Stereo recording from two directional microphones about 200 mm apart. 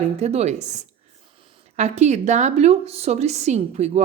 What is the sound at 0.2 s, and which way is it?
A woman's voice, 35° right (ahead or behind).